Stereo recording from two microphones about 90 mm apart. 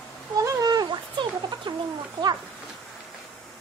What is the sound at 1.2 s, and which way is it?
Music, 65° right (ahead or behind).